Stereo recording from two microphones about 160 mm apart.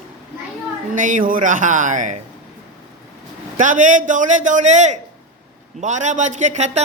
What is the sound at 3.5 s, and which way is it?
Speech, 50° right (ahead or behind).